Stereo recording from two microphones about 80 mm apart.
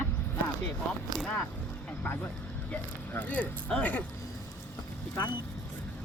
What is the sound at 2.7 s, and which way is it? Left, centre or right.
Speech, centre.